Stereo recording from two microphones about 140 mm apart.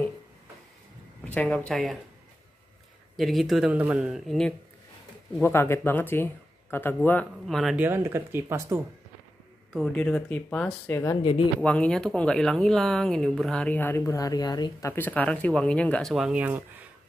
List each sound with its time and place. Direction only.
1.2 s speech: 10° left (ahead or behind)
3.2 s speech: centre (ahead or behind)
5.4 s speech: 15° left (ahead or behind)
7.4 s speech: centre (ahead or behind)
7.8 s speech: 15° right (ahead or behind)
9.8 s speech: 5° left (ahead or behind); by 16.8 s 15° right (ahead or behind)